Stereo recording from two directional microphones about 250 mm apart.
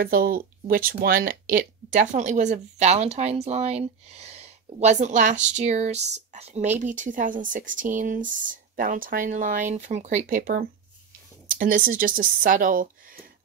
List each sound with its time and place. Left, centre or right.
0.0 s speech: right